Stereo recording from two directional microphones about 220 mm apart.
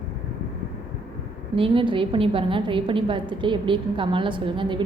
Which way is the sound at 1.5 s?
25° right (ahead or behind).